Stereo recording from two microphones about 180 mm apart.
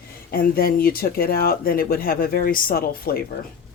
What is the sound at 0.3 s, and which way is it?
Speech, 55° left (ahead or behind).